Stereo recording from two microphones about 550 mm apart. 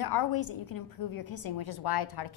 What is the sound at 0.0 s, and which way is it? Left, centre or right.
A woman's voice, left.